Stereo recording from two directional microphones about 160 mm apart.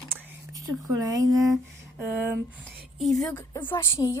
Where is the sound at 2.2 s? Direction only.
10° right (ahead or behind).